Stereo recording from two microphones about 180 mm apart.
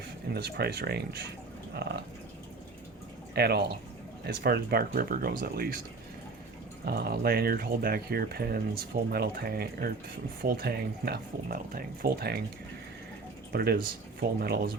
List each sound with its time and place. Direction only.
0.3 s speech: 65° right (ahead or behind)
1.7 s a sound: 65° right (ahead or behind)
3.3 s speech: 65° right (ahead or behind)
6.8 s speech: 60° right (ahead or behind)
13.5 s speech: 60° right (ahead or behind)